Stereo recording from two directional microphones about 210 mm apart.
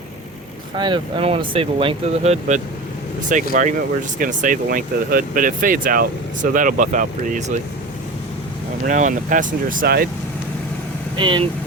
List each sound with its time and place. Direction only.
0.8 s speech: 20° right (ahead or behind)
8.9 s speech: 35° right (ahead or behind)
11.2 s speech: 25° right (ahead or behind)